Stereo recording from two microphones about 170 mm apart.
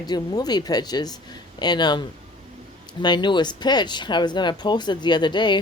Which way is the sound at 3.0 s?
25° left (ahead or behind).